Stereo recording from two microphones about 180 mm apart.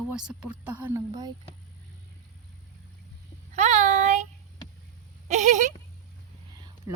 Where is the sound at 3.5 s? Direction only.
40° right (ahead or behind).